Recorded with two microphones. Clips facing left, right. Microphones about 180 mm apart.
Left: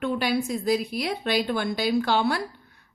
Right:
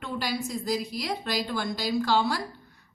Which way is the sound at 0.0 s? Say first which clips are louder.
Left 6 dB; 60° left (ahead or behind).